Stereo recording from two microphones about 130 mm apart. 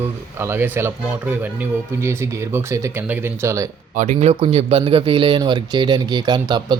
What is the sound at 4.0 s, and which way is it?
Speech, 60° right (ahead or behind).